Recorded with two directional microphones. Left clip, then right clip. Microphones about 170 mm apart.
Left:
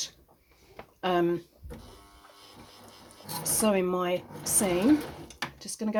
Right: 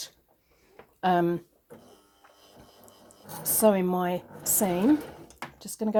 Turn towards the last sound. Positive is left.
turn(degrees=-45)  # may be behind; listen again after turning